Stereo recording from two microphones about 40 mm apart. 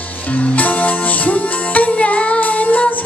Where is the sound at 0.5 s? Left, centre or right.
Left.